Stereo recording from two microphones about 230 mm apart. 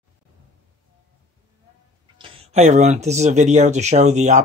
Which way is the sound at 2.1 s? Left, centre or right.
Right.